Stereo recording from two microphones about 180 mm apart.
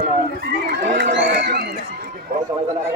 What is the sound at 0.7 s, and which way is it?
Speech, 75° right (ahead or behind).